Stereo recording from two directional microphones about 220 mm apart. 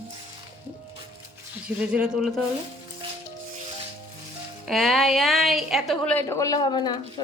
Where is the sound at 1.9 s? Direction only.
5° right (ahead or behind).